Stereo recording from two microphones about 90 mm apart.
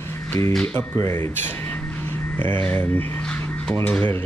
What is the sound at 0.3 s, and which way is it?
Speech, 35° left (ahead or behind).